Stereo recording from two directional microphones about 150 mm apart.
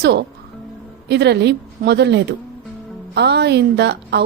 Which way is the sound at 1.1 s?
90° right.